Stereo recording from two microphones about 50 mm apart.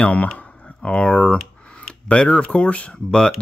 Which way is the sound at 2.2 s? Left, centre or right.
Left.